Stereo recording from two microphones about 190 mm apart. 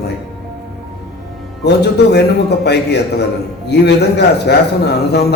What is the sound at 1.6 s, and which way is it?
A man's voice, 60° left (ahead or behind).